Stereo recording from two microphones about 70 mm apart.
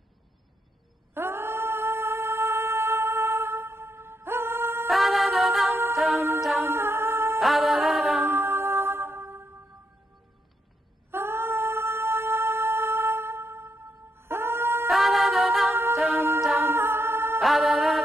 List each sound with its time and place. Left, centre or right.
1.1 s music: right
4.8 s a capella: centre
6.1 s music: right
6.4 s humming: centre
6.7 s humming: right
7.3 s music: centre
8.2 s music: right
11.1 s music: right
14.9 s a capella: centre
15.9 s music: centre
16.5 s music: right
17.4 s music: centre